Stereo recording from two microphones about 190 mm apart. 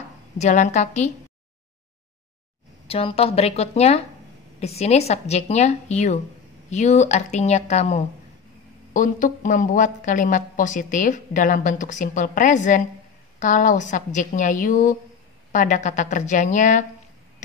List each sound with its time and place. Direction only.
0.4 s speech: 35° left (ahead or behind)
2.9 s a woman's voice: 30° left (ahead or behind)